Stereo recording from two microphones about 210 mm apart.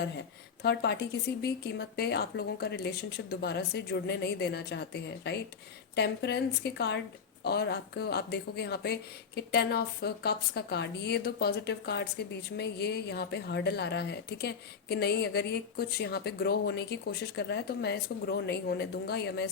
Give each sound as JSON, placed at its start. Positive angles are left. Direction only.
{"t": 0.6, "sound": "speech", "side_deg": 50}